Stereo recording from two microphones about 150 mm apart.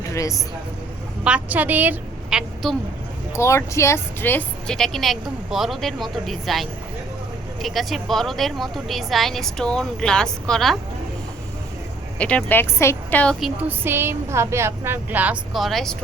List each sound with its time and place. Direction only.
0.1 s speech: 20° left (ahead or behind)
1.2 s a woman's voice: 10° right (ahead or behind)
2.6 s a woman's voice: centre (ahead or behind)
3.3 s a woman's voice: 20° left (ahead or behind); by 10.8 s 5° left (ahead or behind)
12.2 s speech: 10° left (ahead or behind)
13.4 s a woman's voice: 10° right (ahead or behind)